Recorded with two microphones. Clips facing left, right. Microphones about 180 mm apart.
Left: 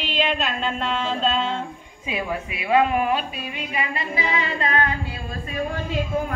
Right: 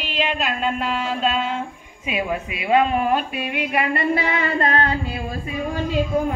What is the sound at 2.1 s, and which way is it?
Speech, 20° right (ahead or behind).